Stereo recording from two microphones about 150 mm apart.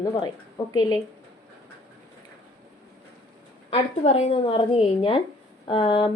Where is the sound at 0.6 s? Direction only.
20° left (ahead or behind).